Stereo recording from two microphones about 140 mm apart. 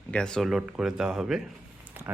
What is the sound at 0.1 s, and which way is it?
Speech, 5° left (ahead or behind).